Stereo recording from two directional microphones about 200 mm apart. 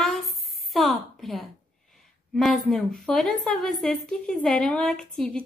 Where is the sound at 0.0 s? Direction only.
Centre (ahead or behind).